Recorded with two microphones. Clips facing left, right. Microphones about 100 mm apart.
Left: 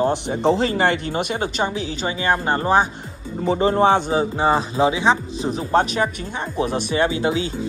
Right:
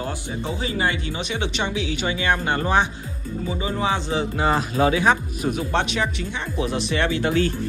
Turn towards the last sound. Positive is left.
turn(degrees=15)  # may be behind; listen again after turning